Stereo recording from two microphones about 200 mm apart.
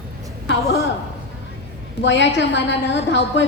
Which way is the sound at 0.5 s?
65° left (ahead or behind).